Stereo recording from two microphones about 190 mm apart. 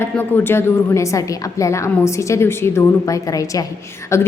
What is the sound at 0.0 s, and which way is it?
A woman's voice, 15° left (ahead or behind).